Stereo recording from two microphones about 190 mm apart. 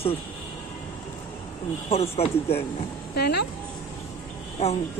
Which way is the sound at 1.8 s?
30° left (ahead or behind).